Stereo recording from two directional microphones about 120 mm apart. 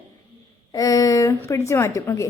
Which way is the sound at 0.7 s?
30° left (ahead or behind).